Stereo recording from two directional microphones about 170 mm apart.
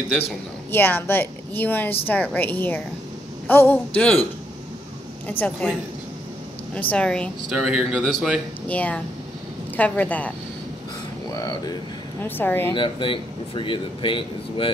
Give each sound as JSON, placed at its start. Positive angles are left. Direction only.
{"t": 0.7, "sound": "a woman's voice", "side_deg": 10}
{"t": 6.7, "sound": "a woman's voice", "side_deg": 5}
{"t": 7.5, "sound": "a woman's voice", "side_deg": -5}
{"t": 11.3, "sound": "a woman's voice", "side_deg": 20}
{"t": 12.7, "sound": "speech", "side_deg": 30}